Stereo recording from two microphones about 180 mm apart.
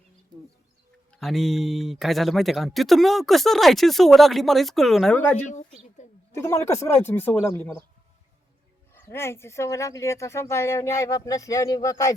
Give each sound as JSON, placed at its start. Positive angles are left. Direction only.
{"t": 1.1, "sound": "speech", "side_deg": 0}
{"t": 8.9, "sound": "speech", "side_deg": 15}